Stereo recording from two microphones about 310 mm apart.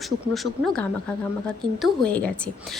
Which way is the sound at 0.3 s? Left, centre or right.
Centre.